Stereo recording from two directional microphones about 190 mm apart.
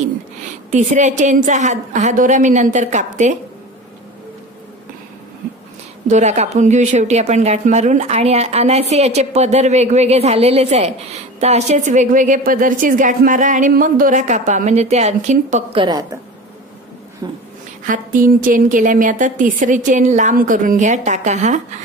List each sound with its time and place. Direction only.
0.7 s a woman's voice: 40° right (ahead or behind)
6.0 s a woman's voice: 35° right (ahead or behind)
15.8 s a woman's voice: 20° right (ahead or behind)
17.2 s a woman's voice: 20° right (ahead or behind)
17.8 s a woman's voice: 45° right (ahead or behind)